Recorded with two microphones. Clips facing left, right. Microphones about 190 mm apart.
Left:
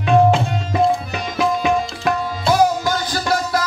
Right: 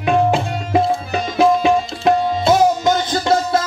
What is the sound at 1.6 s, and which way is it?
Tabla, 25° right (ahead or behind).